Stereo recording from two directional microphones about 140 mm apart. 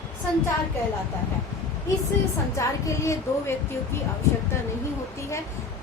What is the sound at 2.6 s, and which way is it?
Speech, 20° left (ahead or behind).